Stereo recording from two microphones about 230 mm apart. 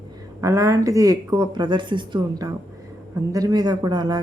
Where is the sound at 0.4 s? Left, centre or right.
Centre.